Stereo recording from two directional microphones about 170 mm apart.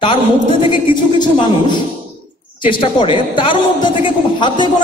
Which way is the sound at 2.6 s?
30° left (ahead or behind).